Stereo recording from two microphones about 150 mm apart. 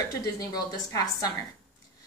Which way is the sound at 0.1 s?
25° left (ahead or behind).